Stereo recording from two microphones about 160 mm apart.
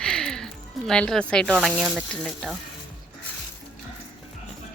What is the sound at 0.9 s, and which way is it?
Speech, 5° left (ahead or behind).